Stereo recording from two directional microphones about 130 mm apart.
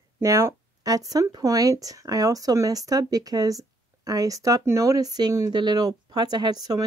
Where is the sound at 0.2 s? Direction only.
20° right (ahead or behind).